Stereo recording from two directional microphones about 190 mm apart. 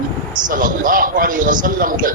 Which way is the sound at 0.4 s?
45° right (ahead or behind).